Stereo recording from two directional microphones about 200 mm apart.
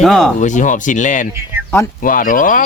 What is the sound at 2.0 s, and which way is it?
Speech, 45° left (ahead or behind).